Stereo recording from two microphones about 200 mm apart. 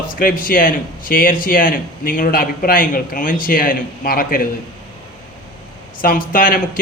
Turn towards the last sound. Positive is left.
turn(degrees=45)  # may be behind; listen again after turning